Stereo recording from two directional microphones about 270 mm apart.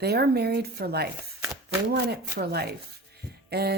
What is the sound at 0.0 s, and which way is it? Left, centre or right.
Speech, right.